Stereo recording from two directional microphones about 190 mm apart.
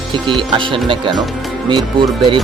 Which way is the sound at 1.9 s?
25° right (ahead or behind).